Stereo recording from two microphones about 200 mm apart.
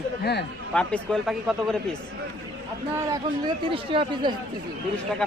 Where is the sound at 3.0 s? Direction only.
15° right (ahead or behind).